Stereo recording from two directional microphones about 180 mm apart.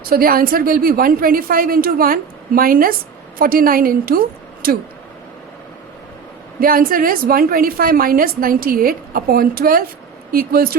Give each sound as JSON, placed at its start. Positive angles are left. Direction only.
{"t": 0.0, "sound": "a woman's voice", "side_deg": -55}
{"t": 6.6, "sound": "a woman's voice", "side_deg": -55}